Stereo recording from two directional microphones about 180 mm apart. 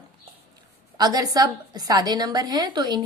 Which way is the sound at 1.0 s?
20° right (ahead or behind).